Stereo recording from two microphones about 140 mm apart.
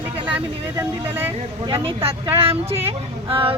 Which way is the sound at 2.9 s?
40° right (ahead or behind).